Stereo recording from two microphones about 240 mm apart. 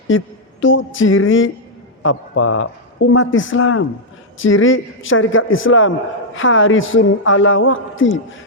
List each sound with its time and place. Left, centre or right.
0.1 s music: left
0.6 s a man's voice: left